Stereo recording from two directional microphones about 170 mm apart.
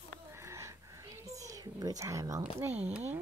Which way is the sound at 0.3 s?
15° right (ahead or behind).